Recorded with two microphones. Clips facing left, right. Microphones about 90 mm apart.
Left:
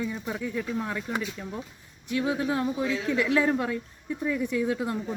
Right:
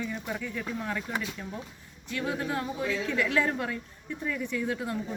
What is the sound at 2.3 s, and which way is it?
Speech, 25° left (ahead or behind).